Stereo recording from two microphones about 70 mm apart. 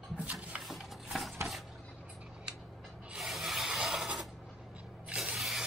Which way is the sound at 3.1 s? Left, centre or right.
Centre.